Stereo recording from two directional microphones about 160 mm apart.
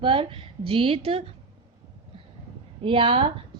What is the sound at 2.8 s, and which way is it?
Speech, 35° right (ahead or behind).